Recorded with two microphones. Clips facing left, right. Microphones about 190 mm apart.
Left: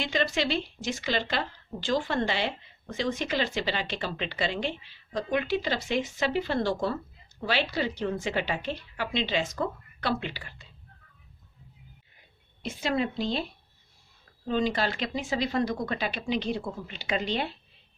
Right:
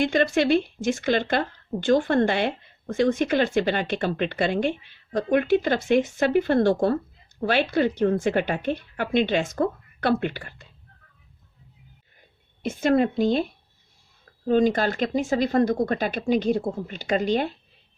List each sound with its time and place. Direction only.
0.0 s speech: 55° right (ahead or behind)
12.6 s speech: 50° right (ahead or behind)